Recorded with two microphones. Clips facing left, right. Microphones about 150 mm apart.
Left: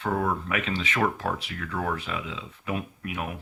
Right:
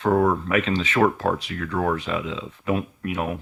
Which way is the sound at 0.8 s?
40° right (ahead or behind).